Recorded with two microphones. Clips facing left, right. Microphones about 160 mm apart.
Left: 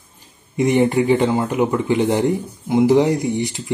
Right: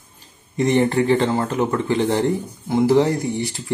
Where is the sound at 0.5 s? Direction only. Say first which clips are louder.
Left 2 dB; 15° left (ahead or behind).